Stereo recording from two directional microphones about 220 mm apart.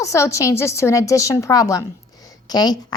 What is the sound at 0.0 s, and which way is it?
A woman's voice, 15° left (ahead or behind).